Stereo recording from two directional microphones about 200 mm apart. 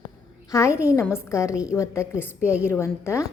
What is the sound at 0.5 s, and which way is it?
A woman's voice, 15° left (ahead or behind).